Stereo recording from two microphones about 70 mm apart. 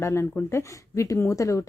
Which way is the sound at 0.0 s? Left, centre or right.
Left.